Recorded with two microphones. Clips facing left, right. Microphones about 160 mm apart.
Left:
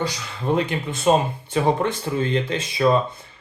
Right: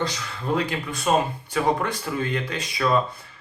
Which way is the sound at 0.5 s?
25° left (ahead or behind).